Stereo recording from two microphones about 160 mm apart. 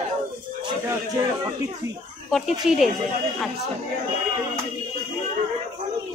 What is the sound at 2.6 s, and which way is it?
Speech, 5° right (ahead or behind).